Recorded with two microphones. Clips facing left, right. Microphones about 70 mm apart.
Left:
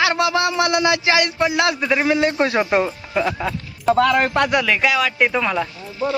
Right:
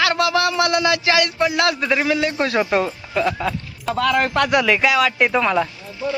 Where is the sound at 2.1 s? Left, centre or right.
Left; by 5.7 s centre.